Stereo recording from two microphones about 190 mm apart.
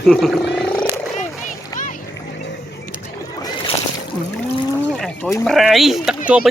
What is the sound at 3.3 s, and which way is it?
Boat, 20° left (ahead or behind).